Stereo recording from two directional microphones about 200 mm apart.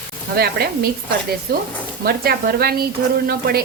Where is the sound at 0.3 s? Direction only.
50° right (ahead or behind).